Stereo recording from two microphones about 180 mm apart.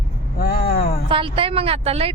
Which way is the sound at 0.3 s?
55° left (ahead or behind).